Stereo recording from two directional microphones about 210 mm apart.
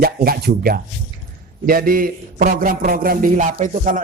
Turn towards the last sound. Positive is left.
turn(degrees=-40)  # may be behind; listen again after turning